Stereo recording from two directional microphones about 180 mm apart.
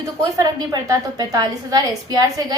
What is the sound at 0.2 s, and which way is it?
A woman's voice, 20° right (ahead or behind).